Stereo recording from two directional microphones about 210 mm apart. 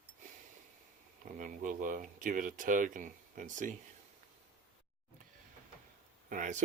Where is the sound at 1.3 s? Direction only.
40° right (ahead or behind).